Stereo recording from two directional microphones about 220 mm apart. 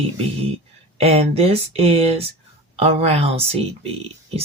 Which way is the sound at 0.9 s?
25° right (ahead or behind).